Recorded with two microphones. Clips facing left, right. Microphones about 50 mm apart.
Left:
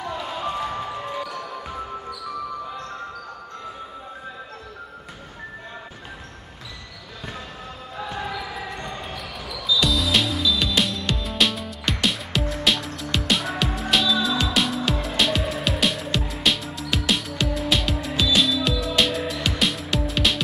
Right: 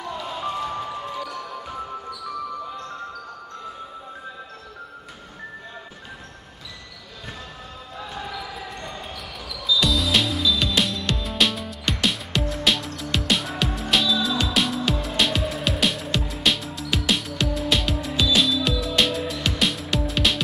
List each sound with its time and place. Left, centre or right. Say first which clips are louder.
0.0 s basketball bounce: left 1 dB; centre
1.4 s music: left 1 dB; centre
8.0 s basketball bounce: left 3 dB; centre
9.0 s basketball bounce: left 2 dB; centre
9.8 s music: even; centre